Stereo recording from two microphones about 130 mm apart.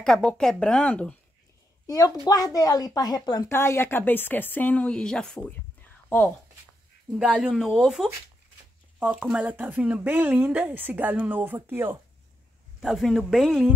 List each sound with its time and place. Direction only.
0.0 s speech: 5° left (ahead or behind)
1.9 s a woman's voice: 30° left (ahead or behind)
3.5 s speech: 20° left (ahead or behind)
7.2 s speech: 5° right (ahead or behind)
12.8 s speech: centre (ahead or behind)